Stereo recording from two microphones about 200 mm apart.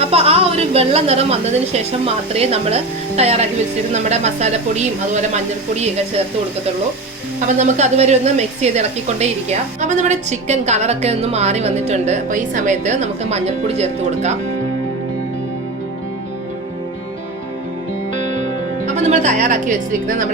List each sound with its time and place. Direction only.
0.0 s a woman's voice: 30° right (ahead or behind)
7.4 s a woman's voice: 35° right (ahead or behind)
18.9 s speech: 35° right (ahead or behind)